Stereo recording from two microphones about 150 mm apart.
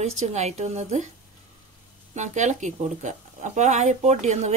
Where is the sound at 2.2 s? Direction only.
50° right (ahead or behind).